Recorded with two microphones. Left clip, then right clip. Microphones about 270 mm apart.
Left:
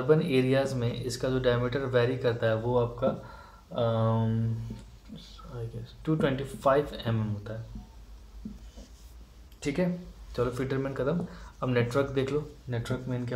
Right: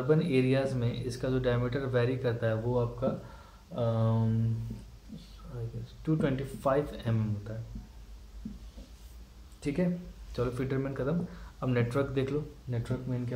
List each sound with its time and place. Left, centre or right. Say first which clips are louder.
0.0 s speech: left 3 dB; centre
6.0 s speech: left 3 dB; left
9.6 s speech: left 3 dB; left
10.3 s speech: left 3 dB; centre
12.6 s speech: left 3 dB; left